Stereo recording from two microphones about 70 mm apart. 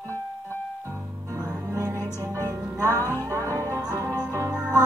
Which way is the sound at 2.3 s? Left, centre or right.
Right.